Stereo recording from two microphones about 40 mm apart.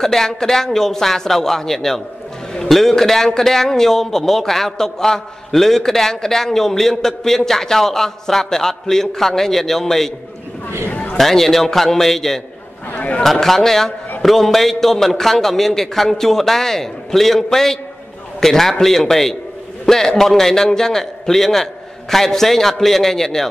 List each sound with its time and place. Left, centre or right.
0.0 s a man's voice: centre
10.9 s a sound: left
11.1 s a man's voice: centre
12.9 s a man's voice: left
13.2 s a man's voice: centre